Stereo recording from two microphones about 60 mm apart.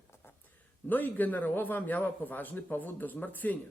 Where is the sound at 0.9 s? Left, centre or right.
Left.